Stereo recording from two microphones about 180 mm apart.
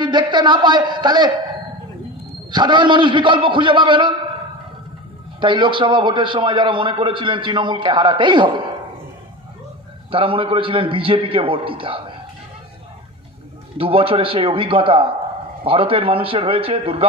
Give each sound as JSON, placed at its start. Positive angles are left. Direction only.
{"t": 0.0, "sound": "a man's voice", "side_deg": -25}
{"t": 2.5, "sound": "a man's voice", "side_deg": -25}
{"t": 5.4, "sound": "a man's voice", "side_deg": -25}
{"t": 10.1, "sound": "a man's voice", "side_deg": -30}
{"t": 13.7, "sound": "a man's voice", "side_deg": -30}